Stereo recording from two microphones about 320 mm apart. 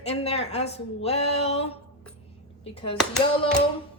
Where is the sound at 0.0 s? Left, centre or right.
Centre.